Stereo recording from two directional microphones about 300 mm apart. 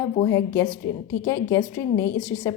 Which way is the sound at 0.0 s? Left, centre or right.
Centre.